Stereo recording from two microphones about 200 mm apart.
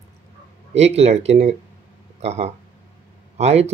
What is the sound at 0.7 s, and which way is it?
Speech, 30° right (ahead or behind).